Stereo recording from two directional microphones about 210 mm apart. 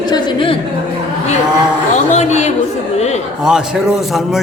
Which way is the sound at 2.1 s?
35° left (ahead or behind).